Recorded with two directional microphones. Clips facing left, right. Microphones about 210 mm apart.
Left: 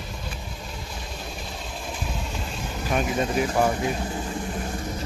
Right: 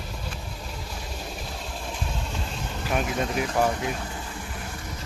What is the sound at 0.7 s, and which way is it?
Vehicle, 5° right (ahead or behind).